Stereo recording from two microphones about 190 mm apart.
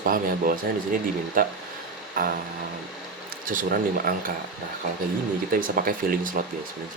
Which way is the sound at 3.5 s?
45° right (ahead or behind).